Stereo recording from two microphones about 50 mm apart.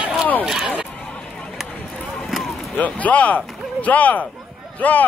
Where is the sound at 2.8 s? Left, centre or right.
Left.